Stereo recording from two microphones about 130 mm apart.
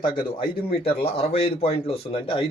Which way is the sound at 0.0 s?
40° left (ahead or behind).